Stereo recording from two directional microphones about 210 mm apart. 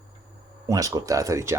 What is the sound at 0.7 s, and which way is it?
Speech, 15° right (ahead or behind).